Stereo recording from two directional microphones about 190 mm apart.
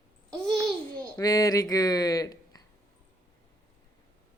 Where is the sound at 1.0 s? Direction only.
15° left (ahead or behind).